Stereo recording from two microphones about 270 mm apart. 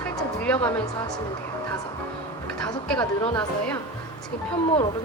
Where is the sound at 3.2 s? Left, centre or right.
Centre.